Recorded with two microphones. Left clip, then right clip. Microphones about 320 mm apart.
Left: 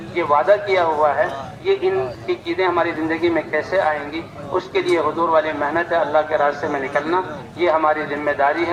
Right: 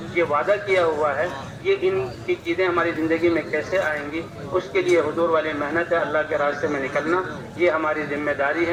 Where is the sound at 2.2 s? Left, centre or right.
Centre.